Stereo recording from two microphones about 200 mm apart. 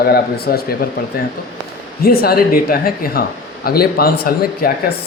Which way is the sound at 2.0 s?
50° left (ahead or behind).